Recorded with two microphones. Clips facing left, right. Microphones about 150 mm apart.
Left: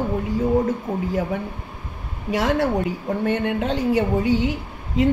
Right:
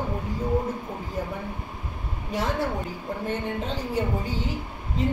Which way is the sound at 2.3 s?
75° left (ahead or behind).